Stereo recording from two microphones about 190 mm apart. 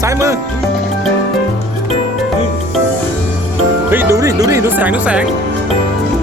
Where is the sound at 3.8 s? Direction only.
10° right (ahead or behind).